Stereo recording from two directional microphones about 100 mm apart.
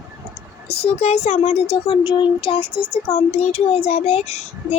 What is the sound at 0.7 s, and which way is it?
A child's voice, 85° left.